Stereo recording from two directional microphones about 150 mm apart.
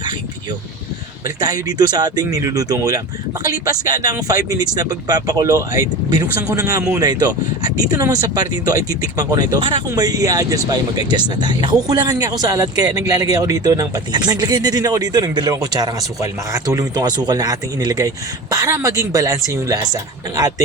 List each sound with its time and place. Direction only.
1.4 s speech: 25° right (ahead or behind)